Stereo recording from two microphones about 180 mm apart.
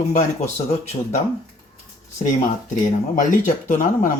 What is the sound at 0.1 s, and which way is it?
Speech, 40° left (ahead or behind).